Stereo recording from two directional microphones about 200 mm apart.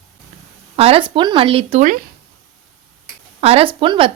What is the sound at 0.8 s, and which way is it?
A woman's voice, 25° right (ahead or behind).